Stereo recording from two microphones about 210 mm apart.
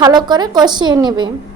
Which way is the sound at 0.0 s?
20° right (ahead or behind).